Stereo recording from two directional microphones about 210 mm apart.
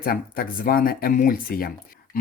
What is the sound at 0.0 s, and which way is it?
Speech, 45° left (ahead or behind).